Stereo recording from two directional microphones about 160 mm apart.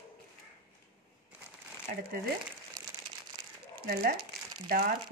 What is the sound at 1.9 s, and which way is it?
Speech, 55° right (ahead or behind).